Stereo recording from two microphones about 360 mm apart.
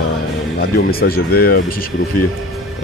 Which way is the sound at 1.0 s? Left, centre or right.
Left.